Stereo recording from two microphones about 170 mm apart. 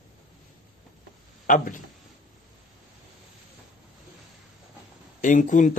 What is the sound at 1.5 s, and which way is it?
Speech, 50° left (ahead or behind).